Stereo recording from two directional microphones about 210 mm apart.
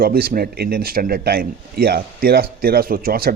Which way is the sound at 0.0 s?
45° right (ahead or behind).